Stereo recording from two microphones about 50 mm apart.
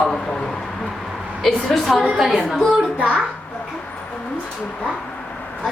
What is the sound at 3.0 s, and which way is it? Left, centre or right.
Speech, right.